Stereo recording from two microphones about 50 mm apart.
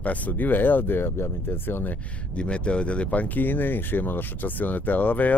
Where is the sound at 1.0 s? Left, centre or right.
Left.